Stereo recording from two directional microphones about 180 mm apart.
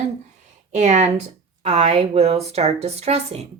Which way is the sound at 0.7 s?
40° right (ahead or behind).